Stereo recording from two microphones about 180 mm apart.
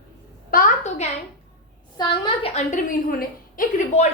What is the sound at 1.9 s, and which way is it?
A woman's voice, 25° left (ahead or behind).